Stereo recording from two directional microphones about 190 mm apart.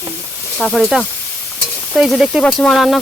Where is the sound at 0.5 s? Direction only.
Centre (ahead or behind).